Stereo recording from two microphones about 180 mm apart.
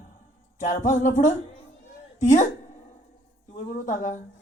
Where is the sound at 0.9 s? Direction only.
45° left (ahead or behind).